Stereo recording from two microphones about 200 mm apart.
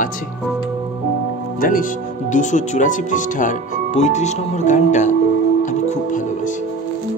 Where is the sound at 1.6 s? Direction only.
45° left (ahead or behind).